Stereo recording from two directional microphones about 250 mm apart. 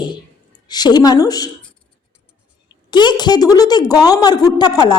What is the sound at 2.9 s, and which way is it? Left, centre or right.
A woman's voice, centre.